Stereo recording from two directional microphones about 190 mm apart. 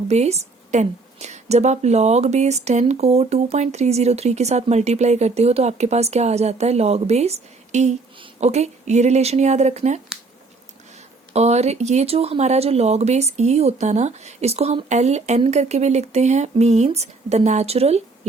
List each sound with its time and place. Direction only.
0.1 s a woman's voice: 35° right (ahead or behind)
11.3 s a woman's voice: 35° right (ahead or behind)